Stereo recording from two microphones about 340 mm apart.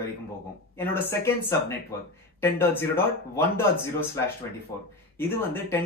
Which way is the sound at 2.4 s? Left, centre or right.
Centre.